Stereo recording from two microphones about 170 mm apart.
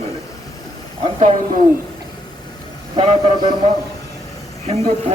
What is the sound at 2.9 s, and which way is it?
Speech, 25° right (ahead or behind).